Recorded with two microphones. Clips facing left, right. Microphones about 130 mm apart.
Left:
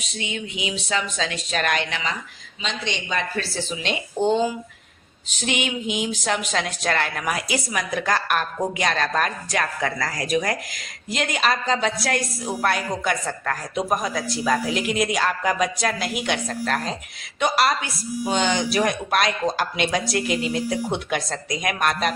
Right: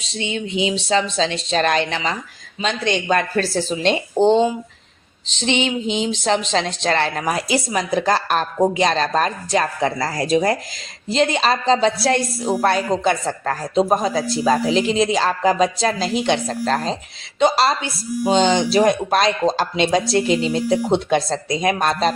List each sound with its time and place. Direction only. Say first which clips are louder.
0.0 s speech: right 5 dB; 30° right (ahead or behind)
2.6 s a woman's voice: right 8 dB; 50° right (ahead or behind); by 22.1 s 30° right (ahead or behind)